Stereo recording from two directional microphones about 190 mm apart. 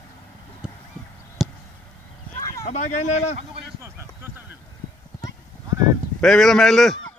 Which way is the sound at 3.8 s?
15° right (ahead or behind).